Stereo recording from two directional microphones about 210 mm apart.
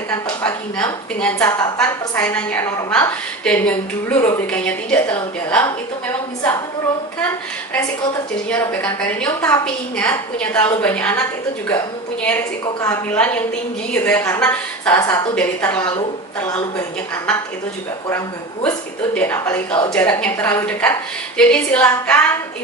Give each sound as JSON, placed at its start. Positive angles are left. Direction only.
{"t": 0.1, "sound": "a woman's voice", "side_deg": 10}
{"t": 8.5, "sound": "a woman's voice", "side_deg": 5}
{"t": 16.4, "sound": "a woman's voice", "side_deg": 20}
{"t": 17.3, "sound": "a woman's voice", "side_deg": 5}